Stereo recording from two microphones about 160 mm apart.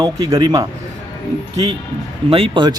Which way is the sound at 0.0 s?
25° right (ahead or behind).